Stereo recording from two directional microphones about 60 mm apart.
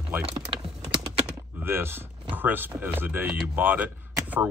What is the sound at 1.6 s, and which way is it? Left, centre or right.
Speech, right.